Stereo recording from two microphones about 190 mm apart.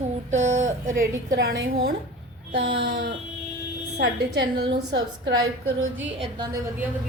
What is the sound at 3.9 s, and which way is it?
A woman's voice, 60° right (ahead or behind).